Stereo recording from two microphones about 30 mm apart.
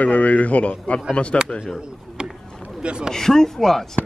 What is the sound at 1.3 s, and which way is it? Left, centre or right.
Speech, left.